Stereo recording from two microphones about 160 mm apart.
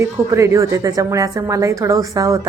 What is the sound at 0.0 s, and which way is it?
A woman's voice, 20° right (ahead or behind).